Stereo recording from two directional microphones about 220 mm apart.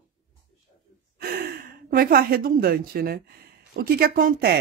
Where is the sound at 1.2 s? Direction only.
45° right (ahead or behind).